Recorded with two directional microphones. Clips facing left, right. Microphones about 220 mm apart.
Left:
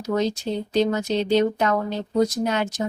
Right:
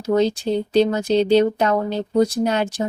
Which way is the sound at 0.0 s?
30° right (ahead or behind).